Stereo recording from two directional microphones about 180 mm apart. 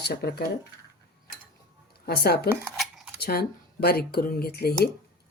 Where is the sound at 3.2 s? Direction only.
60° left (ahead or behind).